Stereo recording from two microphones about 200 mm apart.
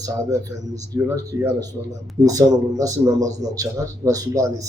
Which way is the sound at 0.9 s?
15° right (ahead or behind).